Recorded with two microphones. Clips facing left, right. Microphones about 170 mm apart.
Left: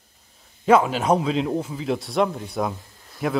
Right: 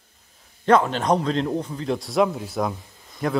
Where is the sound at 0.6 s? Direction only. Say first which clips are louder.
Left 1 dB; 5° left (ahead or behind).